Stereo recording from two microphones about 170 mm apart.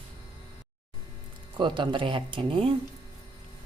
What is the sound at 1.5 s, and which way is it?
Speech, 30° right (ahead or behind).